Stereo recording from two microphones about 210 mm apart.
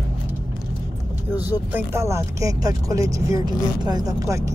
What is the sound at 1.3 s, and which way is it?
Speech, 10° right (ahead or behind).